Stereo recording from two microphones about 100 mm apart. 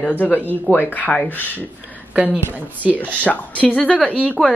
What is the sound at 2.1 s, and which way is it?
Speech, 15° right (ahead or behind).